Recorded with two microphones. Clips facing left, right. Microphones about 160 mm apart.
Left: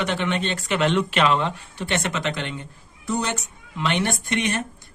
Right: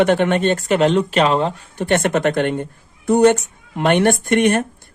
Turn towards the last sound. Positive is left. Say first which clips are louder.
# right 10 dB
turn(degrees=-55)  # may be behind; listen again after turning